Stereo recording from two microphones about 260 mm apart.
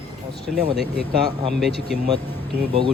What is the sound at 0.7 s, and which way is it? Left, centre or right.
Speech, left.